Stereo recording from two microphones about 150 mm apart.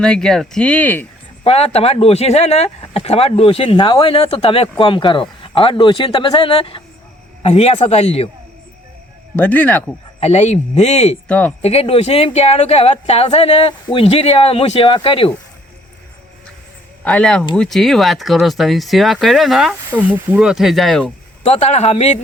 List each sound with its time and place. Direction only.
0.0 s speech: 5° left (ahead or behind)
1.5 s speech: 45° left (ahead or behind)
9.3 s speech: 10° left (ahead or behind)
10.2 s speech: 45° left (ahead or behind)
11.3 s speech: 10° left (ahead or behind)
11.6 s speech: 40° left (ahead or behind)
17.0 s speech: 10° left (ahead or behind)
21.4 s speech: 45° left (ahead or behind)